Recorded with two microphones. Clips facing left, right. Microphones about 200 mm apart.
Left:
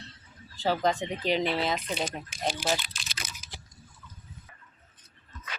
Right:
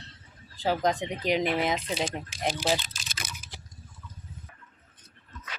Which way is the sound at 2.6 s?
35° right (ahead or behind).